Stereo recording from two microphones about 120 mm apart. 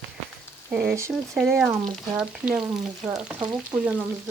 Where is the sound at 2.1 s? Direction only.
10° right (ahead or behind).